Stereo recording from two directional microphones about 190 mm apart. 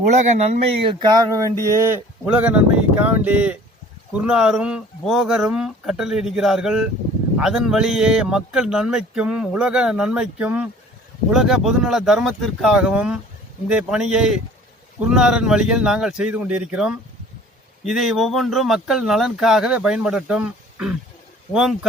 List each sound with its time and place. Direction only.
0.1 s speech: 40° right (ahead or behind)
1.1 s a man's voice: 15° right (ahead or behind); by 21.8 s centre (ahead or behind)